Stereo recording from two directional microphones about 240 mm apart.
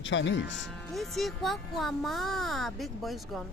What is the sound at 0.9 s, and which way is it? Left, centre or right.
Speech, centre.